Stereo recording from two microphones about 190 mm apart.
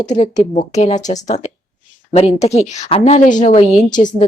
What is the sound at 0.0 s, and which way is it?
A woman's voice, 40° left (ahead or behind).